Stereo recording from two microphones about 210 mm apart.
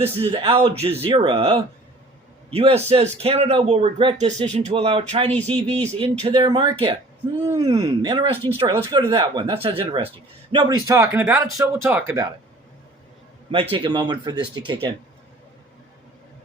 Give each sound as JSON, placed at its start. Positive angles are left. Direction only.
{"t": 0.0, "sound": "a man's voice", "side_deg": -25}
{"t": 13.5, "sound": "a man's voice", "side_deg": -25}